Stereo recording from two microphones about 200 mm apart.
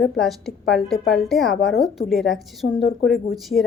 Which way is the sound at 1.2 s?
Centre (ahead or behind).